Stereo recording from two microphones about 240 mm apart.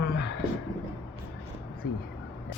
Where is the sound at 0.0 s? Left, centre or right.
Left.